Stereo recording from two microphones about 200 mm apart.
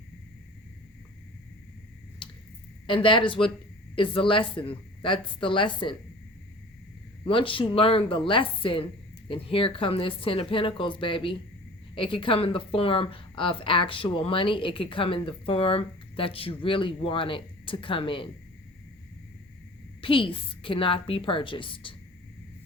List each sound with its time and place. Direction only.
2.2 s squish: 25° left (ahead or behind)
2.8 s a woman's voice: 25° left (ahead or behind)
7.3 s a woman's voice: 25° left (ahead or behind)
20.0 s a woman's voice: 25° left (ahead or behind)